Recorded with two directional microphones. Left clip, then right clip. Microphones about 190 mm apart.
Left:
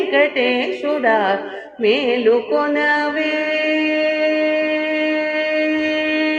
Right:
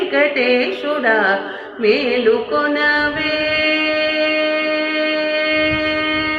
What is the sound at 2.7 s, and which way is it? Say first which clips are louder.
Speech: right 2 dB; 55° left (ahead or behind).